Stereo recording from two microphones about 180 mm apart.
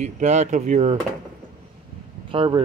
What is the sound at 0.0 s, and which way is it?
Speech, 40° right (ahead or behind).